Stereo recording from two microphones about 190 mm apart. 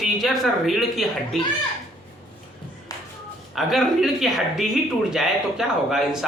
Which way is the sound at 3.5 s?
Centre (ahead or behind).